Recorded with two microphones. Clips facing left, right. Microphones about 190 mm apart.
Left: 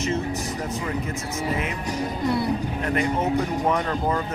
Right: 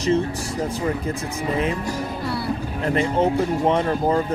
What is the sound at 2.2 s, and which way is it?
Music, 20° left (ahead or behind).